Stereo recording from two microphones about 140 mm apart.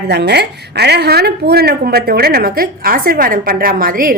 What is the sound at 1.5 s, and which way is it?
A woman's voice, 90° right.